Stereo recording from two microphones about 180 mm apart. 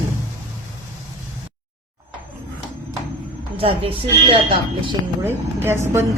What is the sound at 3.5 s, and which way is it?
Speech, 30° right (ahead or behind).